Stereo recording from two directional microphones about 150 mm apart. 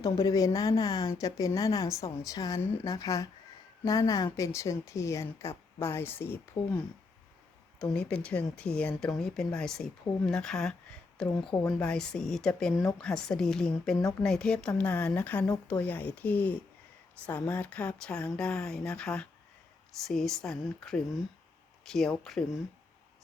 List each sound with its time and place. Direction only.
0.0 s speech: 25° left (ahead or behind); by 22.4 s 5° left (ahead or behind)